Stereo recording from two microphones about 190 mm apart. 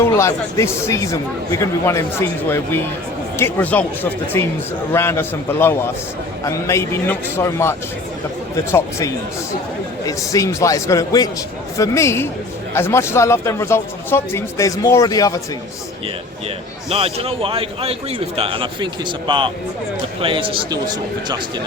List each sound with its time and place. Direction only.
0.0 s speech: 15° left (ahead or behind)
16.9 s speech: 30° right (ahead or behind)
20.2 s speech: 25° right (ahead or behind)